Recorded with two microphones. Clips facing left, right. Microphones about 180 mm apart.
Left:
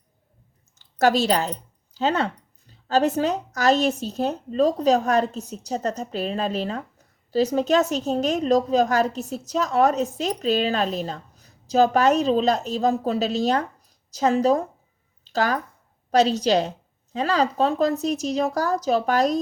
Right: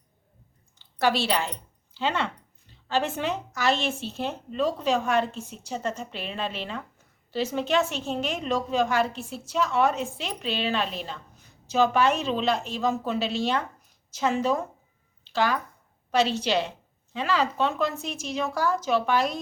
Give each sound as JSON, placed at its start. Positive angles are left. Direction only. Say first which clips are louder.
{"t": 0.8, "sound": "speech", "louder": "left 5 dB", "side_deg": 45}
{"t": 15.2, "sound": "a sound", "louder": "left 2 dB", "side_deg": 40}
{"t": 16.1, "sound": "speech", "louder": "left 5 dB", "side_deg": 40}